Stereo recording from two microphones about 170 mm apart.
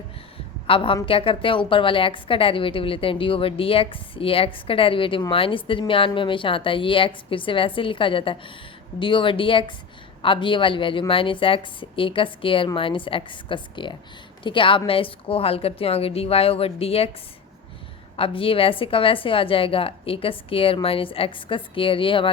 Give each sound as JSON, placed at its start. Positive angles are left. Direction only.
{"t": 0.7, "sound": "a woman's voice", "side_deg": 30}
{"t": 18.2, "sound": "a woman's voice", "side_deg": 30}